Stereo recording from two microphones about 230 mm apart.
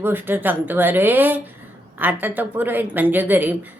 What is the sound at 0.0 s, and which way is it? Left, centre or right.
A woman's voice, centre.